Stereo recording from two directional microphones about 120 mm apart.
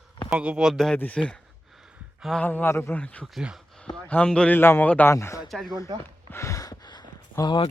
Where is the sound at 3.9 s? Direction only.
10° left (ahead or behind).